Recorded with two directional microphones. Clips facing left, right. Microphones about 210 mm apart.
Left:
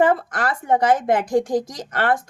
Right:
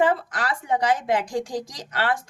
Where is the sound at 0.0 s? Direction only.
50° left (ahead or behind).